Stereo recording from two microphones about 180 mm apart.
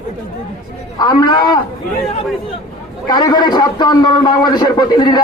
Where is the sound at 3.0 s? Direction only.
20° left (ahead or behind).